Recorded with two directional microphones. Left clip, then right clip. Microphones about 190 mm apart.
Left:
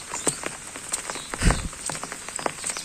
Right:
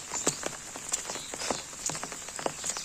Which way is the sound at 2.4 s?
5° left (ahead or behind).